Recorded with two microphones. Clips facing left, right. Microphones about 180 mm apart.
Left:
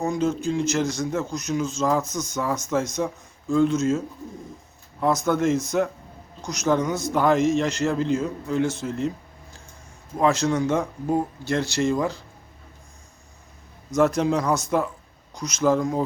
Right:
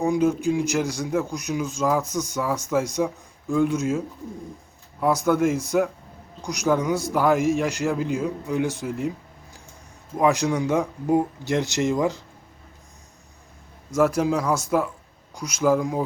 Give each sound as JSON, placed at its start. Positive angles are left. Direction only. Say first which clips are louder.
{"t": 0.0, "sound": "a man's voice", "louder": "right 3 dB", "side_deg": -15}
{"t": 13.9, "sound": "a man's voice", "louder": "even", "side_deg": -5}